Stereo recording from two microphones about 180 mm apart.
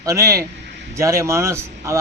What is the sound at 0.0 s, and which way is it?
Speech, 20° right (ahead or behind).